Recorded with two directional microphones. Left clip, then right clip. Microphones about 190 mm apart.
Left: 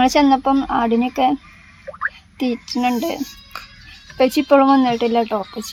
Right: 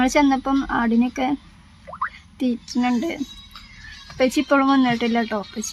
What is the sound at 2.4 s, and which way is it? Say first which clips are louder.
A woman's voice: left 3 dB; 5° left (ahead or behind).